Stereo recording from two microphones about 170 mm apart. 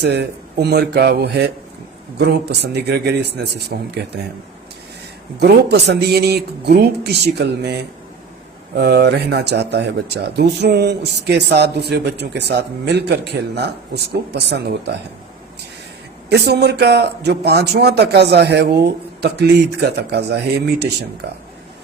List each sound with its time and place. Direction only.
0.0 s speech: 75° right (ahead or behind)
5.4 s speech: 80° right
16.3 s speech: 80° right